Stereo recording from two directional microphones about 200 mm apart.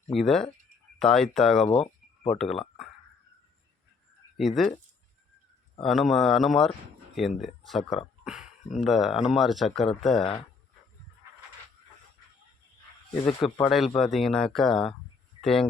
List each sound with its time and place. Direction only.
0.2 s speech: centre (ahead or behind)
1.6 s a sound: 30° left (ahead or behind)
4.4 s speech: centre (ahead or behind)
5.8 s speech: centre (ahead or behind)
8.2 s a sound: 5° right (ahead or behind)
8.8 s speech: centre (ahead or behind)
13.2 s speech: centre (ahead or behind)